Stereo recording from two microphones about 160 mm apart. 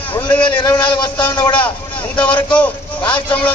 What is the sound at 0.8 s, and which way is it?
Speech, 30° left (ahead or behind).